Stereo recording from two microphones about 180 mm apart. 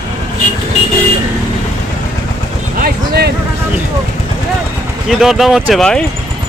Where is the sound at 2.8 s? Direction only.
60° right (ahead or behind).